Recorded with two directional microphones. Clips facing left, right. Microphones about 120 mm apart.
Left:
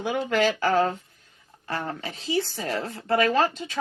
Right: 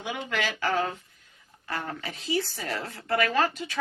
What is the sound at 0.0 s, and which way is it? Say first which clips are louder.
A woman's voice: left 8 dB; 40° left (ahead or behind).